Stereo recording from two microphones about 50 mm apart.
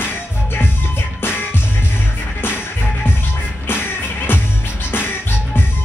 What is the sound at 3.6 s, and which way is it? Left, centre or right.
Music, left.